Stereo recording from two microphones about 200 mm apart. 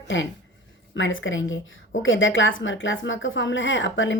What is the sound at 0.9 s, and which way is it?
Speech, 70° left (ahead or behind).